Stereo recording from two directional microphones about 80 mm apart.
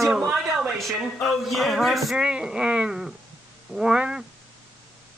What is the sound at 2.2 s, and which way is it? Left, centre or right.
Speech, centre.